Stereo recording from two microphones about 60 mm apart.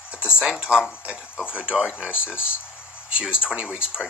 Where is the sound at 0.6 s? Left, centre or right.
Centre.